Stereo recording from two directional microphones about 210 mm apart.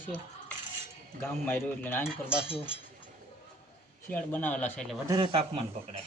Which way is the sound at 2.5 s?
25° left (ahead or behind).